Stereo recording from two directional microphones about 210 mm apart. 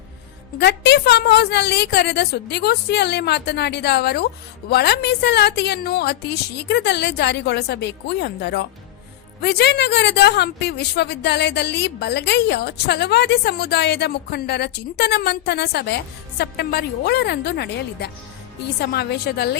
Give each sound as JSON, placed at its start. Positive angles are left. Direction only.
{"t": 0.6, "sound": "a woman's voice", "side_deg": 55}